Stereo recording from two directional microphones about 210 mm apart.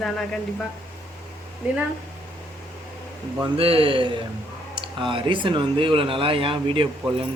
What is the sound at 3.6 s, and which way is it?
Speech, 25° right (ahead or behind).